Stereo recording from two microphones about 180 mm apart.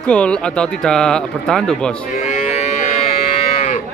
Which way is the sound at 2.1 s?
40° left (ahead or behind).